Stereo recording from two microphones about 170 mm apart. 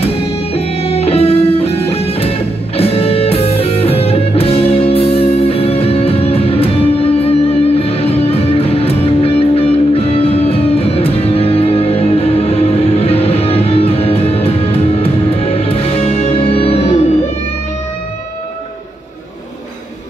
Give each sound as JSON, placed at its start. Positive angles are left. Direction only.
{"t": 0.0, "sound": "music", "side_deg": 35}